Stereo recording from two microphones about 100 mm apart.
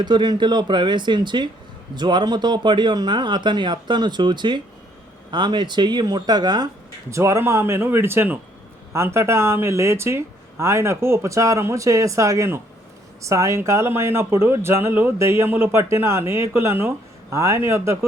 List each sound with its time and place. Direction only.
0.0 s speech: 50° right (ahead or behind)
7.1 s speech: 30° right (ahead or behind)